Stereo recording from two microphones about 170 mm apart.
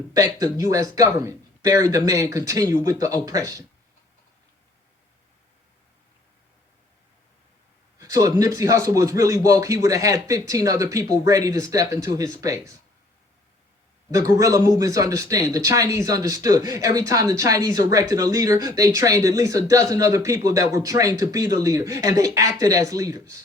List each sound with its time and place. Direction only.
0.1 s speech: 20° right (ahead or behind)
7.9 s speech: 20° right (ahead or behind)
14.1 s speech: 20° right (ahead or behind)